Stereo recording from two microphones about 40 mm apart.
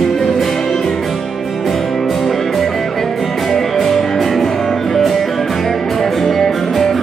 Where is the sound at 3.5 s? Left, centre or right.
Centre.